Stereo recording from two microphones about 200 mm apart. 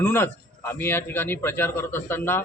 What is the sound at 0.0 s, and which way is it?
A man's voice, 10° left (ahead or behind).